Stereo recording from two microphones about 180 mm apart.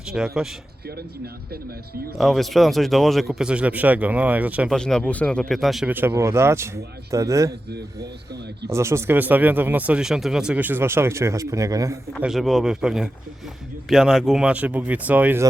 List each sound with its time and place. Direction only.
0.1 s speech: 5° right (ahead or behind)
2.1 s speech: centre (ahead or behind)
4.8 s speech: 5° left (ahead or behind); by 7.5 s 15° right (ahead or behind)
8.7 s speech: 15° right (ahead or behind)
12.2 s speech: centre (ahead or behind)